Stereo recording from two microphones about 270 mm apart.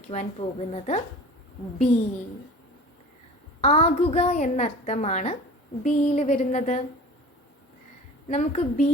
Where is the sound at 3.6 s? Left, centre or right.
Left.